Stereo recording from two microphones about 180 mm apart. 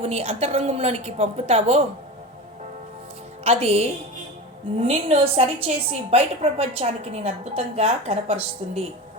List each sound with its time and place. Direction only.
0.0 s a woman's voice: 35° right (ahead or behind)
3.4 s a woman's voice: 35° right (ahead or behind)